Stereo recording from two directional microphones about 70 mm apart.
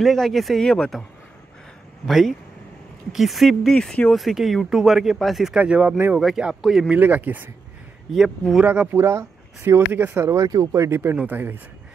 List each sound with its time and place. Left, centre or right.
0.0 s speech: centre
2.0 s speech: centre
5.5 s speech: centre
6.1 s speech: centre
6.9 s speech: right
8.1 s speech: centre
8.9 s speech: right
10.2 s speech: right
10.9 s speech: right